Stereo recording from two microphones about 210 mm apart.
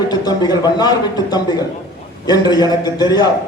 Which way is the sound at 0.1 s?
20° left (ahead or behind).